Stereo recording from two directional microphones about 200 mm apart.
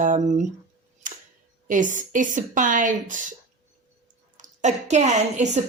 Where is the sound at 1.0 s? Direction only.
40° right (ahead or behind).